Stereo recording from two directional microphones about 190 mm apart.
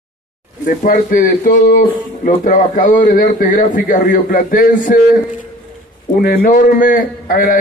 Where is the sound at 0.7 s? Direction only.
45° left (ahead or behind).